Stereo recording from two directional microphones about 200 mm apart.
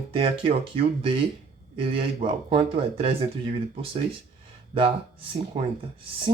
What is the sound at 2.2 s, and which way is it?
Speech, 25° right (ahead or behind).